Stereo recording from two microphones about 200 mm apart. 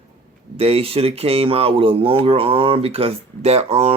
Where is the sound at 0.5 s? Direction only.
30° right (ahead or behind).